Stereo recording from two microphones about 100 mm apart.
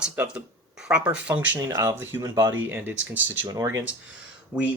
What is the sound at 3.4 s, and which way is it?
Speech, 35° right (ahead or behind).